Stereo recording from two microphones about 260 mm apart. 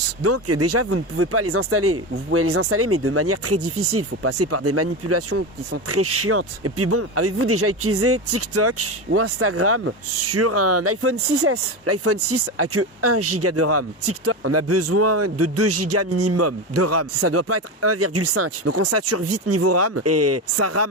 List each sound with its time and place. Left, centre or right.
0.2 s speech: right